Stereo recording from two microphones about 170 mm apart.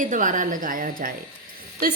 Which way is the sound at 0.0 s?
50° right (ahead or behind).